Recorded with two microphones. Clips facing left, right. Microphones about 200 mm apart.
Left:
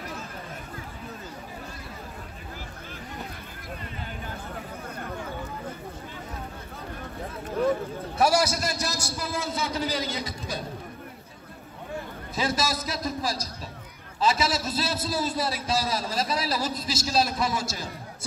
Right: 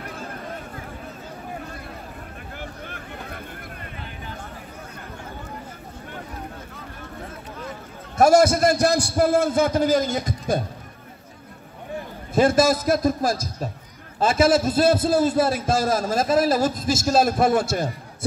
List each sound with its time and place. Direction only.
0.0 s a sound: 55° right (ahead or behind)
8.2 s a man's voice: 50° right (ahead or behind)
12.4 s a man's voice: 50° right (ahead or behind)